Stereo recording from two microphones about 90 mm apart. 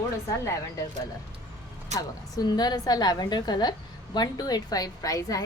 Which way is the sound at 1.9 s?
40° left (ahead or behind).